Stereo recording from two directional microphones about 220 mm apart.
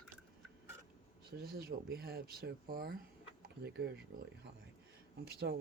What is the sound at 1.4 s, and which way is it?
Speech, 40° right (ahead or behind).